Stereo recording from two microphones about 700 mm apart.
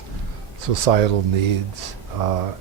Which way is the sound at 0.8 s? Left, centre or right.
Right.